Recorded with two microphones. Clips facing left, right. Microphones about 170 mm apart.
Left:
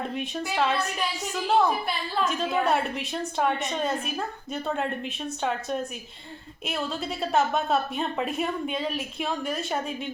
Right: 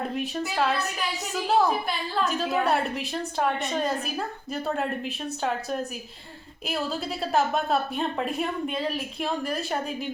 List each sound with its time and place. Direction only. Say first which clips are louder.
0.0 s a woman's voice: right 2 dB; centre (ahead or behind)